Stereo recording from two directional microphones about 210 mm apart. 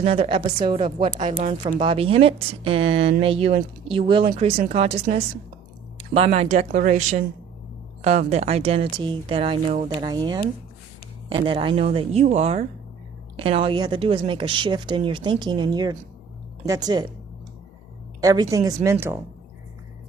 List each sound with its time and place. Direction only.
0.0 s a woman's voice: 25° right (ahead or behind)
18.2 s speech: 15° right (ahead or behind)